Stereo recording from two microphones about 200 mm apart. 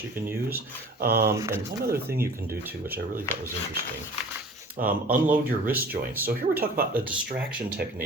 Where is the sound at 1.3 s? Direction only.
15° right (ahead or behind).